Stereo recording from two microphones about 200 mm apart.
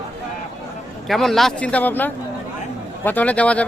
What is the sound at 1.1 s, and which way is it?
Speech, centre (ahead or behind).